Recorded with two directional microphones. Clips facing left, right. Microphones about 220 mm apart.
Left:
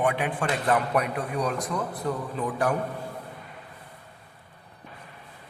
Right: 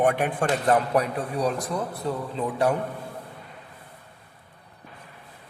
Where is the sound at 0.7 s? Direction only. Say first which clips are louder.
Right 2 dB; 30° right (ahead or behind).